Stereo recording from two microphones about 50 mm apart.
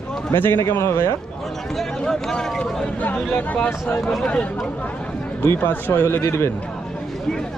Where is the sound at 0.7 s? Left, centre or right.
Left.